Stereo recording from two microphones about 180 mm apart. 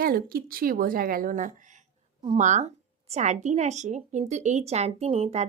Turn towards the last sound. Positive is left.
turn(degrees=-35)  # may be behind; listen again after turning